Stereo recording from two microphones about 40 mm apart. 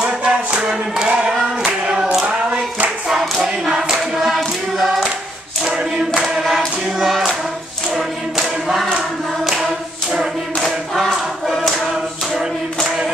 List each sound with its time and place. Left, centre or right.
0.0 s music: right
1.6 s clapping: right
3.3 s choir: centre
4.7 s hands: centre
6.2 s choir: centre
9.4 s singing: centre
11.7 s choir: centre